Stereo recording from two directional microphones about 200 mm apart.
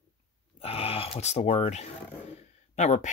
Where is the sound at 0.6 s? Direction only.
30° left (ahead or behind).